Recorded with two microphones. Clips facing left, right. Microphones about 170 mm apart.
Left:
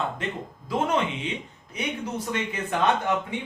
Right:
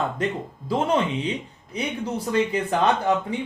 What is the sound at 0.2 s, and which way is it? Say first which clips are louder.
Speech: right 6 dB; 40° right (ahead or behind).